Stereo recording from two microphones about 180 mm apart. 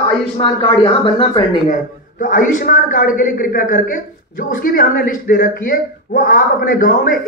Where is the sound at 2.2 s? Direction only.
50° left (ahead or behind).